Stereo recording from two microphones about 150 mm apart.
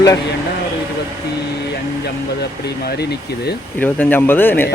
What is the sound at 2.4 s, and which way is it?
Speech, 90° left.